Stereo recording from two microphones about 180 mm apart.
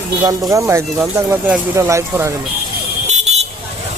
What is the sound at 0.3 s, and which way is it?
Speech, 20° right (ahead or behind).